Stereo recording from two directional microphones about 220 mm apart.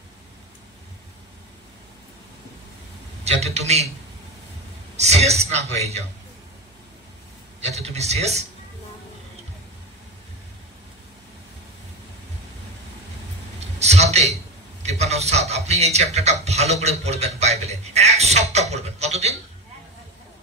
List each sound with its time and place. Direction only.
3.3 s speech: 30° right (ahead or behind)
4.9 s speech: 30° right (ahead or behind)
7.6 s speech: 30° right (ahead or behind)
13.7 s a sound: 30° right (ahead or behind)
17.4 s speech: 30° right (ahead or behind)